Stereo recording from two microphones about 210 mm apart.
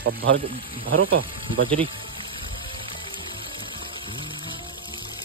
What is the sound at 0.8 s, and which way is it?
Speech, 75° right (ahead or behind).